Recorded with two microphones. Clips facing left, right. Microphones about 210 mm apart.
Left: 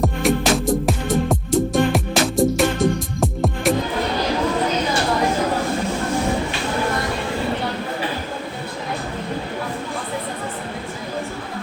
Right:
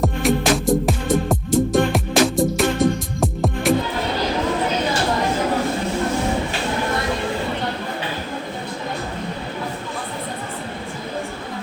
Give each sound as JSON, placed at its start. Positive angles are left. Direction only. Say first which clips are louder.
{"t": 0.0, "sound": "music", "louder": "even", "side_deg": 0}